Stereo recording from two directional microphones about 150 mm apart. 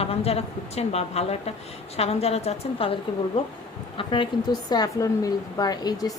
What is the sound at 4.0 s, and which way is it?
A woman's voice, 35° left (ahead or behind).